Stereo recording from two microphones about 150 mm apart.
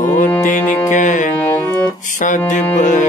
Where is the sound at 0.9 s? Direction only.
55° left (ahead or behind).